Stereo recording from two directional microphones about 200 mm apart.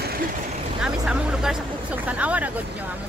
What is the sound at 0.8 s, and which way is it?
Speech, 5° right (ahead or behind).